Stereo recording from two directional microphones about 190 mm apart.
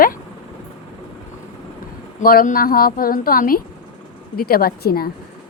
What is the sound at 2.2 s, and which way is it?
Speech, 50° left (ahead or behind).